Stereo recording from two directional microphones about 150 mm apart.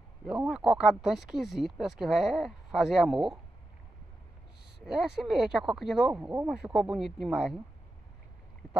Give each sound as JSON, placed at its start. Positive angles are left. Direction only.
{"t": 0.2, "sound": "speech", "side_deg": -5}
{"t": 4.7, "sound": "speech", "side_deg": -5}